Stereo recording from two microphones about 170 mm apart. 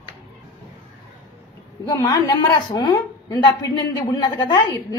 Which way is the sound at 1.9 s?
20° left (ahead or behind).